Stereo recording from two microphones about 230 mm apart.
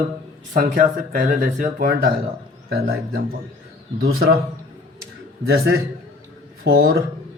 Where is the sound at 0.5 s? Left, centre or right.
Right.